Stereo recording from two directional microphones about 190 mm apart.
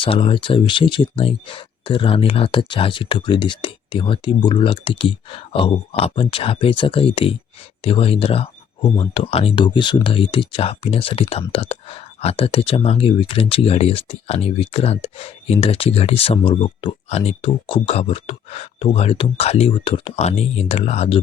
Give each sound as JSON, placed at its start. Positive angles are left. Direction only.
{"t": 0.0, "sound": "speech", "side_deg": 25}